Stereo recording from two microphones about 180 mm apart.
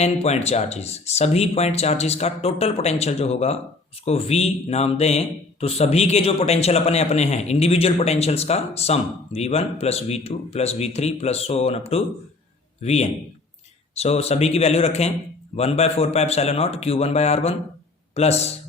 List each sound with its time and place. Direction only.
0.0 s a man's voice: 35° left (ahead or behind)